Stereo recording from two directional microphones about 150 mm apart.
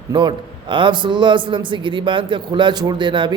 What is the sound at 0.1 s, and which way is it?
A man's voice, 30° right (ahead or behind).